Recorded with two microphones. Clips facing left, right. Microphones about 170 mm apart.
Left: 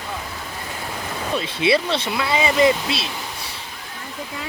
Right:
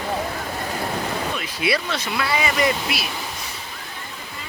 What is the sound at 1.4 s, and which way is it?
Speech, 25° left (ahead or behind).